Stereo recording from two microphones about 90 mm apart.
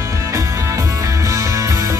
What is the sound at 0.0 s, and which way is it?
Music, 35° right (ahead or behind).